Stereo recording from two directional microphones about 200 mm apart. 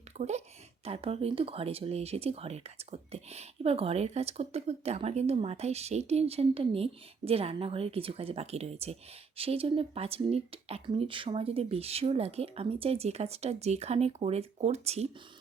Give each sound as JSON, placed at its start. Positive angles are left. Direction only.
{"t": 0.2, "sound": "speech", "side_deg": -35}